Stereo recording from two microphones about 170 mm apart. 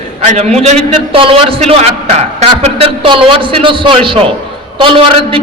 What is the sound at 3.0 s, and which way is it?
A man's voice, 30° right (ahead or behind).